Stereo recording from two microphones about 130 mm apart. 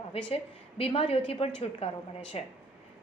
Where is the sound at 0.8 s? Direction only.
50° left (ahead or behind).